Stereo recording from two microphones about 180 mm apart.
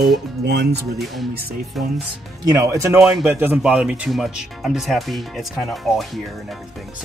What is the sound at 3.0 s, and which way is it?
Speech, 5° right (ahead or behind).